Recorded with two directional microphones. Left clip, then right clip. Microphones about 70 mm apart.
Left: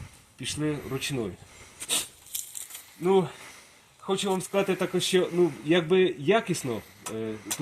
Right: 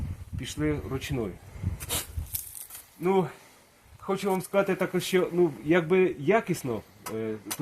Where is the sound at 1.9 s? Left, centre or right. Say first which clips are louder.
Left 4 dB; right.